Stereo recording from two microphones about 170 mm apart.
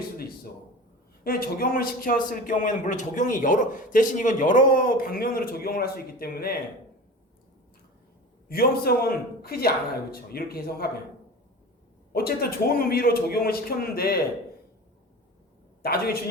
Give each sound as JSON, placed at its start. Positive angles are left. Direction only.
{"t": 1.2, "sound": "a man's voice", "side_deg": 60}
{"t": 8.4, "sound": "a man's voice", "side_deg": 60}
{"t": 12.1, "sound": "a man's voice", "side_deg": 65}
{"t": 15.8, "sound": "a man's voice", "side_deg": 65}